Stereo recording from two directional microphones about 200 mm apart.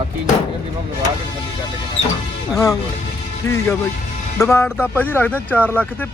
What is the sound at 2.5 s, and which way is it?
Speech, 15° left (ahead or behind).